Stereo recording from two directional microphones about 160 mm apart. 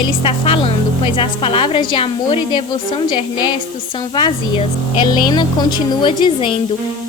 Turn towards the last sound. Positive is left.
turn(degrees=30)  # may be behind; listen again after turning